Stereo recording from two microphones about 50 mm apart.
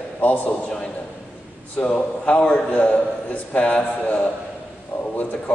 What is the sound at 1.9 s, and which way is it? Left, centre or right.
A man's voice, left.